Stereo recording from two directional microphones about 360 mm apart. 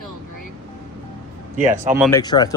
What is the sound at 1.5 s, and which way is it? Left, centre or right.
Speech, right.